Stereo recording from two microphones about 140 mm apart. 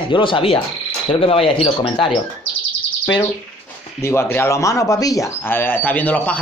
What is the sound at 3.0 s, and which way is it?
Speech, 30° left (ahead or behind).